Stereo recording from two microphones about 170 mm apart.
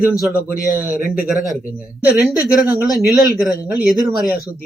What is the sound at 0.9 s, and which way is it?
Speech, 45° right (ahead or behind).